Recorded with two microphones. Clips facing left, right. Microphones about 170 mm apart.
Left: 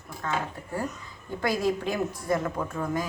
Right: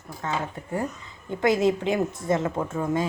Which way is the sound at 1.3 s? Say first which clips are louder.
Right 5 dB; 20° right (ahead or behind).